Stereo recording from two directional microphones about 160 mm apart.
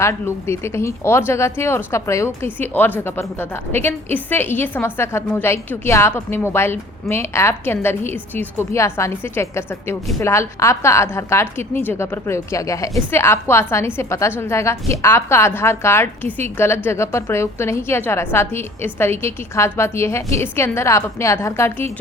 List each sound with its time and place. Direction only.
0.0 s a woman's voice: 15° left (ahead or behind)